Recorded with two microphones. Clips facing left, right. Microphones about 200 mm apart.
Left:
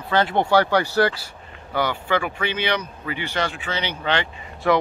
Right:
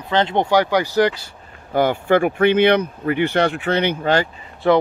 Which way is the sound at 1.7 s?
50° right (ahead or behind).